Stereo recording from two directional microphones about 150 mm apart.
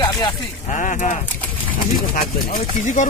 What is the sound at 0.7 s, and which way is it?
Speech, 60° left (ahead or behind).